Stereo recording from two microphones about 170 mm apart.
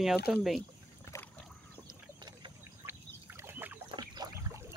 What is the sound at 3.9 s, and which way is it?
Boat, 25° right (ahead or behind).